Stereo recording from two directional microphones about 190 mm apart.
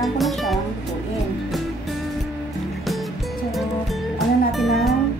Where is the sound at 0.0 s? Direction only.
Centre (ahead or behind).